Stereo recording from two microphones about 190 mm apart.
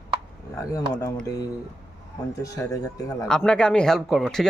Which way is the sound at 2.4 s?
15° left (ahead or behind).